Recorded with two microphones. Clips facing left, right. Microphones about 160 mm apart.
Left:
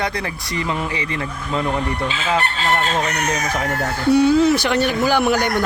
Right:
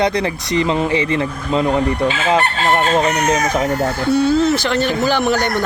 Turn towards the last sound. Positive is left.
turn(degrees=10)  # may be behind; listen again after turning